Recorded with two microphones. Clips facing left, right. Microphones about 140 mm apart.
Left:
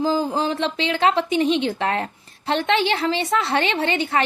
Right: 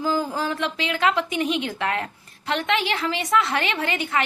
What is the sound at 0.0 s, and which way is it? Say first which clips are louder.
A woman's voice: left 3 dB; 25° left (ahead or behind).